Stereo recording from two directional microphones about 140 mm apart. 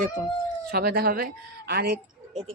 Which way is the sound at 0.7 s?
90° right.